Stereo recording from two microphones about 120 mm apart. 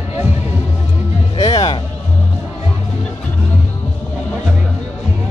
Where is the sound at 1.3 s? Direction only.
30° left (ahead or behind).